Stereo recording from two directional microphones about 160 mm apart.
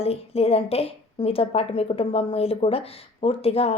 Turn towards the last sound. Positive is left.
turn(degrees=40)  # may be behind; listen again after turning